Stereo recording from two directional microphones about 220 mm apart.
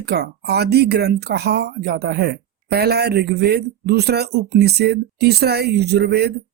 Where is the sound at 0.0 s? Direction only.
50° right (ahead or behind).